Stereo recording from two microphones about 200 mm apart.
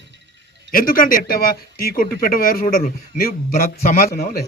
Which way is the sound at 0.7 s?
45° left (ahead or behind).